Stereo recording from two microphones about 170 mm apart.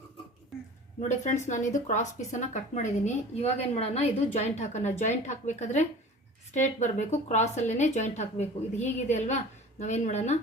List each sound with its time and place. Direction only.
1.0 s a woman's voice: 45° left (ahead or behind)